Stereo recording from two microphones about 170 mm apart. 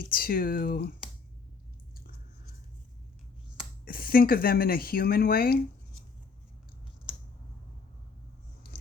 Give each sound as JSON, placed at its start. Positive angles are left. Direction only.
{"t": 0.1, "sound": "speech", "side_deg": 60}
{"t": 3.8, "sound": "speech", "side_deg": 60}